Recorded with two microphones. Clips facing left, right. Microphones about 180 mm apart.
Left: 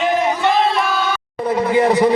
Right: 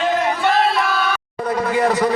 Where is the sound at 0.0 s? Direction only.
15° left (ahead or behind).